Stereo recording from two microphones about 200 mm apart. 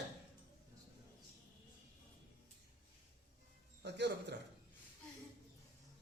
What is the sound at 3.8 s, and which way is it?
Music, 55° right (ahead or behind).